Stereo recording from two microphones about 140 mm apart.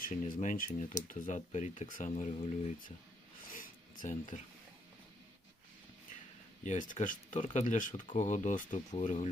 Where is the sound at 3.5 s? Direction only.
75° left (ahead or behind).